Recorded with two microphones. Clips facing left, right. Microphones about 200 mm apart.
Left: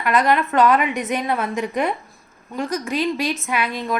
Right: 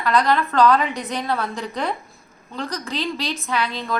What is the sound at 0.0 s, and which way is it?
A woman's voice, 20° left (ahead or behind).